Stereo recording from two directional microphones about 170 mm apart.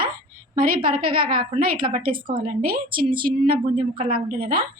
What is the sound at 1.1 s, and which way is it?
Speech, 30° right (ahead or behind).